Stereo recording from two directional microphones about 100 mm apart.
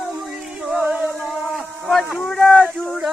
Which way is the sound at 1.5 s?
Centre (ahead or behind).